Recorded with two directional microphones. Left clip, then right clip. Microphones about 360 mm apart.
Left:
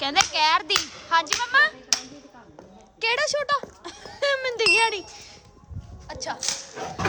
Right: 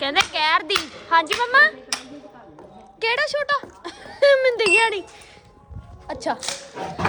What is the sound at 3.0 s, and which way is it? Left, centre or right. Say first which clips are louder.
Speech: right 2 dB; centre.